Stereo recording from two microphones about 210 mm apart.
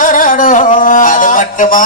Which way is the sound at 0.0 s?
40° left (ahead or behind).